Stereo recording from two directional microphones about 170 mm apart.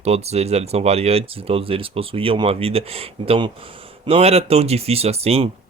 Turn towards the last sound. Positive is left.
turn(degrees=-35)  # may be behind; listen again after turning